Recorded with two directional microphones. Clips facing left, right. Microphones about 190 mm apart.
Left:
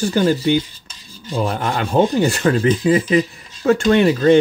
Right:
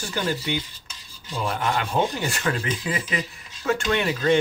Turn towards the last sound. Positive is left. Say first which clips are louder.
# left 9 dB
turn(degrees=35)  # may be behind; listen again after turning